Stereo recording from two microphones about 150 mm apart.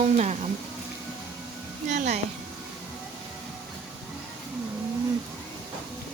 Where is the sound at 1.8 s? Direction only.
50° right (ahead or behind).